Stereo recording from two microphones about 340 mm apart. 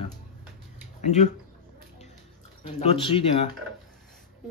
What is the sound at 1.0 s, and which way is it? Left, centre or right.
Speech, centre.